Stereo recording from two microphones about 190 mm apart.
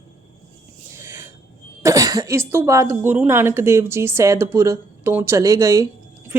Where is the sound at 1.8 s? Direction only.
20° right (ahead or behind).